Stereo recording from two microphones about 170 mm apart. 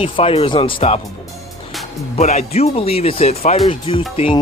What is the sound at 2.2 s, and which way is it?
Speech, 40° left (ahead or behind).